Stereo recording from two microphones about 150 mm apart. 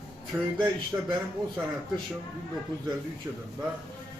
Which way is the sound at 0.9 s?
25° right (ahead or behind).